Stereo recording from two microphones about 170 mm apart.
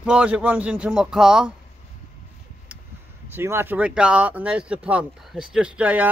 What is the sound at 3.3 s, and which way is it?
Speech, 15° right (ahead or behind).